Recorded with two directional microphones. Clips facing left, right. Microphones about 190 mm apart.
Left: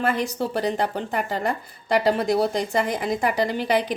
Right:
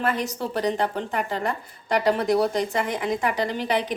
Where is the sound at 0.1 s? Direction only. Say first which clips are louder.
Left 2 dB; 30° left (ahead or behind).